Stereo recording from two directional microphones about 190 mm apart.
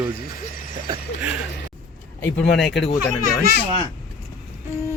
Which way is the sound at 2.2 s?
60° left (ahead or behind).